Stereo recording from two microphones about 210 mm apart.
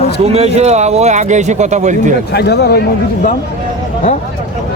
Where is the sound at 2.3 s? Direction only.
50° left (ahead or behind).